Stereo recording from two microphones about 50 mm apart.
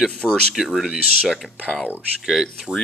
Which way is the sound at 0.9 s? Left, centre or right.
Centre.